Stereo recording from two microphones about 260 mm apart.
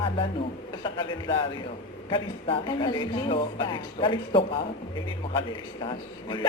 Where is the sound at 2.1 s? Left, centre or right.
Centre.